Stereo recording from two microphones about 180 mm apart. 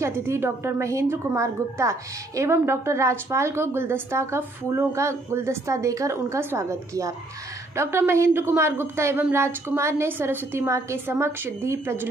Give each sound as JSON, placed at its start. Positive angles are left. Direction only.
{"t": 0.0, "sound": "a woman's voice", "side_deg": -15}